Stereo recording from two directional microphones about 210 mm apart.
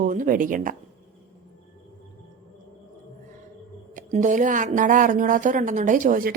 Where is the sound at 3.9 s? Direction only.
35° right (ahead or behind).